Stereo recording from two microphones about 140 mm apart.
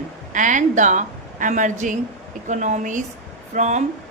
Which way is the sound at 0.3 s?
65° right (ahead or behind).